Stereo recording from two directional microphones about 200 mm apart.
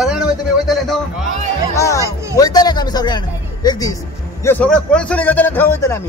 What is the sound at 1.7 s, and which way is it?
A man's voice, 15° left (ahead or behind).